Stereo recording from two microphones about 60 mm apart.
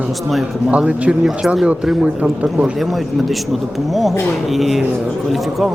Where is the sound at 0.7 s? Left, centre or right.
Right.